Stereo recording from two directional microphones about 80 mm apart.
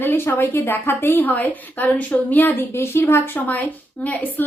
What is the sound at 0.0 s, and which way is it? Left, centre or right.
A woman's voice, left.